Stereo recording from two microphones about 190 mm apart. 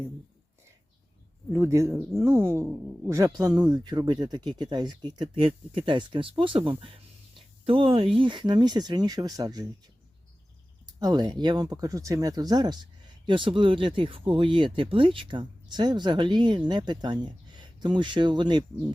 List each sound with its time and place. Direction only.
1.5 s speech: 15° right (ahead or behind)
10.8 s speech: 20° right (ahead or behind)